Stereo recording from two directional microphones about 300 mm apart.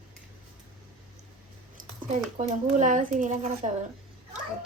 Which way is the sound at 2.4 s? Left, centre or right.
Right.